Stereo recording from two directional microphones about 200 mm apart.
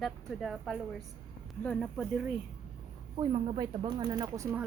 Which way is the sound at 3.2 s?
30° right (ahead or behind).